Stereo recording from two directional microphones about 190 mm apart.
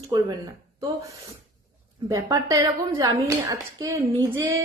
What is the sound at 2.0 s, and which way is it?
A woman's voice, 15° right (ahead or behind).